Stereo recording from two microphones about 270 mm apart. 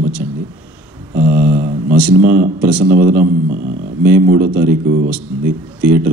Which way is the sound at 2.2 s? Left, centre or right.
Right.